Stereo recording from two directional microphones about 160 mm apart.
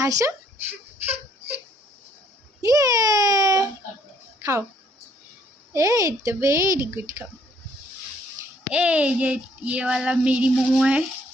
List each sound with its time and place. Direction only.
0.0 s a woman's voice: 20° right (ahead or behind)
1.0 s a sound: 10° right (ahead or behind)
2.6 s a child's voice: 20° right (ahead or behind)
4.4 s a sound: 20° right (ahead or behind)
5.7 s a woman's voice: 20° right (ahead or behind)
8.7 s speech: 10° right (ahead or behind)